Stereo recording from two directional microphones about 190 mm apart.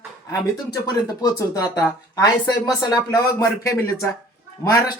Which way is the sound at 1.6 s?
20° left (ahead or behind).